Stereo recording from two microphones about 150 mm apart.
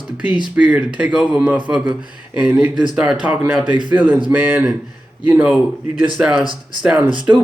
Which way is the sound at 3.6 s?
30° right (ahead or behind).